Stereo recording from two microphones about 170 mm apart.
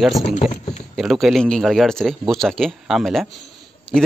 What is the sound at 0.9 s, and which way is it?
Speech, centre (ahead or behind).